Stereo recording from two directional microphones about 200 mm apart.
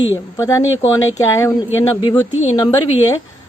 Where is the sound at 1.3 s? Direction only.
15° left (ahead or behind).